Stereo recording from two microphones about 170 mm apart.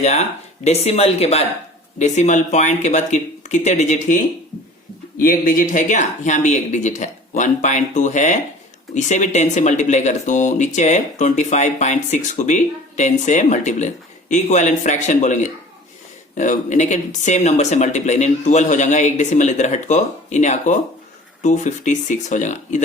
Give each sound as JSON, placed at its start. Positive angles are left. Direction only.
{"t": 0.0, "sound": "speech", "side_deg": 40}